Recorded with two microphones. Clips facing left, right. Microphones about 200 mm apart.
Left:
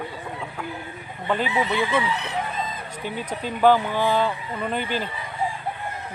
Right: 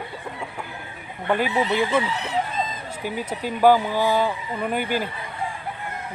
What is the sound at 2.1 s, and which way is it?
Chicken, 60° left (ahead or behind).